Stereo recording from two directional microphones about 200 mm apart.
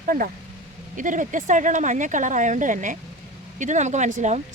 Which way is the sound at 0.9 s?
40° right (ahead or behind).